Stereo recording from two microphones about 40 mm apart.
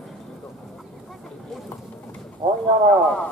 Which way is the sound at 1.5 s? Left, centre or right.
Centre.